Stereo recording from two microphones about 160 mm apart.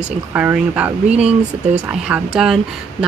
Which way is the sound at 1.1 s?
40° right (ahead or behind).